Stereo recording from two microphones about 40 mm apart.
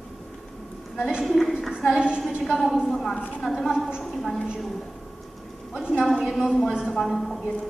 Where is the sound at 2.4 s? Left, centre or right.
Centre.